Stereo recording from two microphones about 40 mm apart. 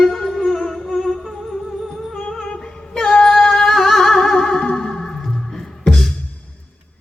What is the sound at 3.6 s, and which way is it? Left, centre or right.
Music, centre.